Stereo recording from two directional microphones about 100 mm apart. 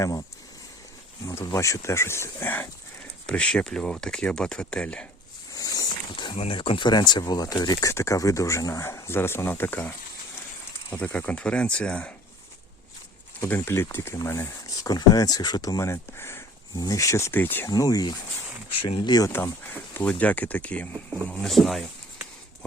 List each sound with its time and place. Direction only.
1.5 s speech: 30° left (ahead or behind)
3.2 s speech: 10° left (ahead or behind)
5.5 s wild animals: 40° left (ahead or behind)
6.3 s speech: 75° left (ahead or behind); by 9.9 s 20° left (ahead or behind)
11.0 s speech: 15° left (ahead or behind)
13.4 s speech: 25° left (ahead or behind)
14.7 s speech: 40° left (ahead or behind)
16.7 s speech: 35° left (ahead or behind); by 17.7 s 20° left (ahead or behind)
17.7 s speech: 40° left (ahead or behind)
18.7 s speech: 60° left (ahead or behind)
19.4 s speech: 20° left (ahead or behind)
21.4 s speech: centre (ahead or behind)